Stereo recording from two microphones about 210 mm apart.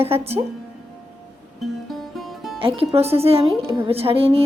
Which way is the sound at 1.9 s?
Centre (ahead or behind).